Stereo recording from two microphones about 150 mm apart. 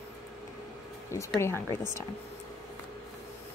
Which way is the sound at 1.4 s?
15° left (ahead or behind).